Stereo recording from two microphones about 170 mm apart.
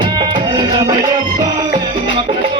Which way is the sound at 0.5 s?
25° right (ahead or behind).